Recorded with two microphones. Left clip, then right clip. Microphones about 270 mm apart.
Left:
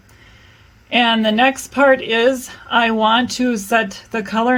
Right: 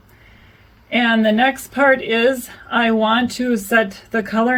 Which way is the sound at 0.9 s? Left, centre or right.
Left.